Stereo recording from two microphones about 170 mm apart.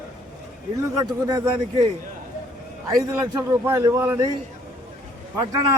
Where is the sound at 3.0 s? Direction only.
20° right (ahead or behind).